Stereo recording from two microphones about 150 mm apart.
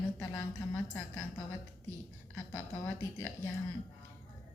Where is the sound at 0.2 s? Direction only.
15° left (ahead or behind).